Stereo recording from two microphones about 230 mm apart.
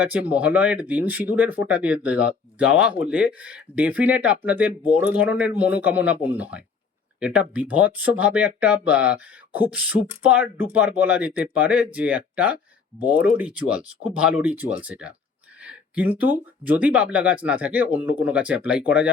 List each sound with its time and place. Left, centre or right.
0.0 s speech: centre